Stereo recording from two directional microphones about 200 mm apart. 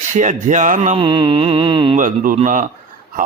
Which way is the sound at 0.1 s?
40° right (ahead or behind).